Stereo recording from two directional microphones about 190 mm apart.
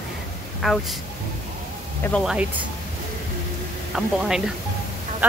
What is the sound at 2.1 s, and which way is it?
Speech, 5° left (ahead or behind).